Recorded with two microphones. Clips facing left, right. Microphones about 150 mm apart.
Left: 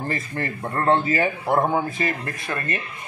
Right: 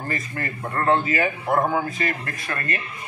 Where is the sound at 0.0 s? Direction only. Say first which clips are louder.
Left 2 dB; 25° left (ahead or behind).